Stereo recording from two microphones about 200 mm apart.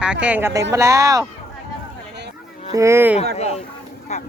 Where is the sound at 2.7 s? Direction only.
15° right (ahead or behind).